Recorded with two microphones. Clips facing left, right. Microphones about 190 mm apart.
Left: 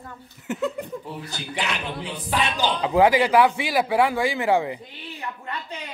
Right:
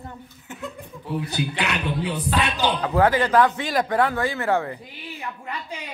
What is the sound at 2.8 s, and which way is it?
Speech, 15° left (ahead or behind).